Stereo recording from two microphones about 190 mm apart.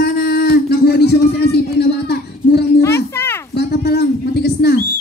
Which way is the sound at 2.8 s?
15° left (ahead or behind).